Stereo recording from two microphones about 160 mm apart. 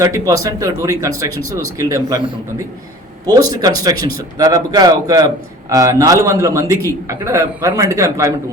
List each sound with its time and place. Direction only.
0.0 s a man's voice: 20° right (ahead or behind)
3.6 s a man's voice: 25° right (ahead or behind)